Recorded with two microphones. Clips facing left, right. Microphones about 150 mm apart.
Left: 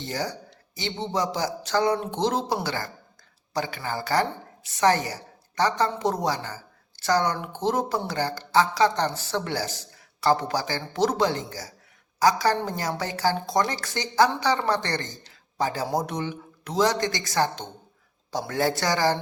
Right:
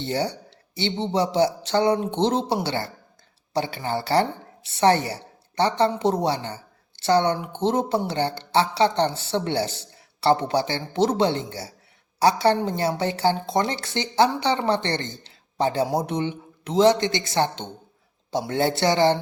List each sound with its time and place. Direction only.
0.0 s a woman's voice: 30° right (ahead or behind)
15.2 s a sound: 25° right (ahead or behind)
16.0 s speech: 25° right (ahead or behind)